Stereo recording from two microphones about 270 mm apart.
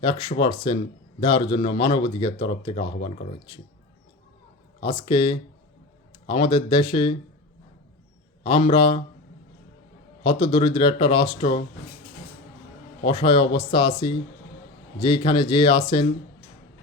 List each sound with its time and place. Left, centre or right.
0.0 s speech: centre
4.8 s speech: centre
8.4 s speech: centre
10.2 s speech: centre
13.1 s speech: centre